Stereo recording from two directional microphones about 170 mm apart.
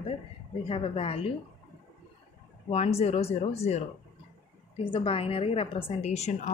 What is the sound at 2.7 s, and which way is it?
A woman's voice, 35° left (ahead or behind).